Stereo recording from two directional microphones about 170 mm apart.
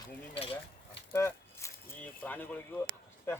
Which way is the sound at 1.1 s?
15° left (ahead or behind).